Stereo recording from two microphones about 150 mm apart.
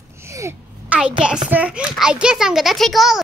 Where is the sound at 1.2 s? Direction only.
5° right (ahead or behind).